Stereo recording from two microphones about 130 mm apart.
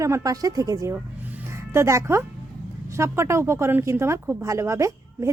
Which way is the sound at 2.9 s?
20° right (ahead or behind).